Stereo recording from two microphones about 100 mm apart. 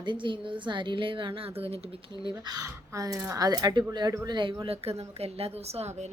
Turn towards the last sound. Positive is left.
turn(degrees=-90)